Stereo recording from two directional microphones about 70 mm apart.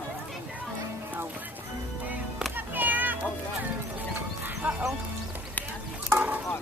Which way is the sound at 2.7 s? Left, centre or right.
Right.